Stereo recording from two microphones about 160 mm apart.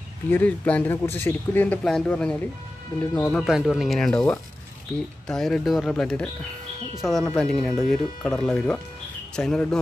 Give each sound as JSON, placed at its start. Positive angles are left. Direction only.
{"t": 0.3, "sound": "speech", "side_deg": 10}
{"t": 5.3, "sound": "speech", "side_deg": 0}